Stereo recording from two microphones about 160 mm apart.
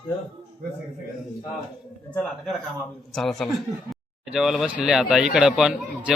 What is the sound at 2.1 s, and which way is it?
A man's voice, centre (ahead or behind).